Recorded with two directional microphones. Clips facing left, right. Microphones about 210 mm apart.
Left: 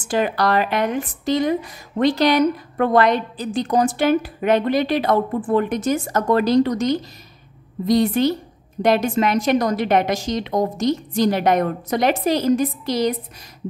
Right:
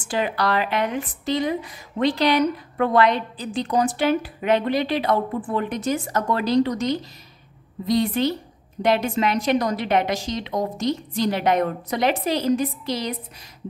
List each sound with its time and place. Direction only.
0.1 s speech: 45° left (ahead or behind)